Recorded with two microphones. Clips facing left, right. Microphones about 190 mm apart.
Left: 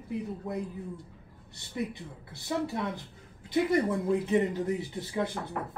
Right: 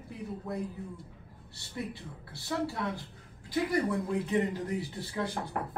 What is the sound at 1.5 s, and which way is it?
Speech, 20° left (ahead or behind).